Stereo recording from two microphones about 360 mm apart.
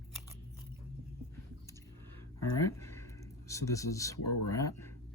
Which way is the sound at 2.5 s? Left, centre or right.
Centre.